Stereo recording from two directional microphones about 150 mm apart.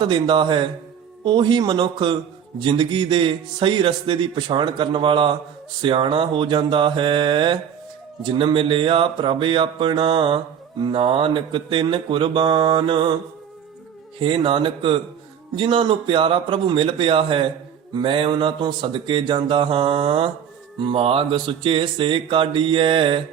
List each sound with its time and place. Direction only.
0.0 s speech: 30° right (ahead or behind)
14.2 s speech: 35° right (ahead or behind)